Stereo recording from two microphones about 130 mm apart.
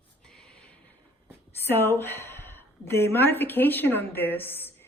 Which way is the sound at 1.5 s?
15° left (ahead or behind).